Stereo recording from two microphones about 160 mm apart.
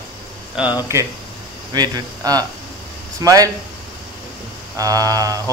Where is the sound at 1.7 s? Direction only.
25° right (ahead or behind).